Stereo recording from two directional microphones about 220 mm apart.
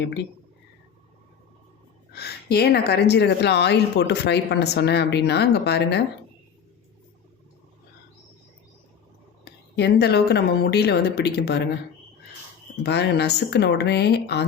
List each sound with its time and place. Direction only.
2.1 s speech: 45° left (ahead or behind)
9.4 s a woman's voice: 50° left (ahead or behind)
12.8 s speech: 50° left (ahead or behind)